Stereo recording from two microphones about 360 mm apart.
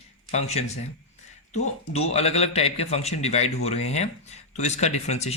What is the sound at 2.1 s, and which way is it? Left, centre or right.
A man's voice, centre.